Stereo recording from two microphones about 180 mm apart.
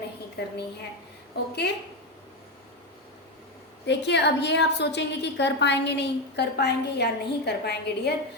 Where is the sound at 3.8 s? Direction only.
75° left (ahead or behind).